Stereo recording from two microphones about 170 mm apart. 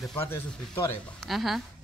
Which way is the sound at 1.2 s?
Centre (ahead or behind).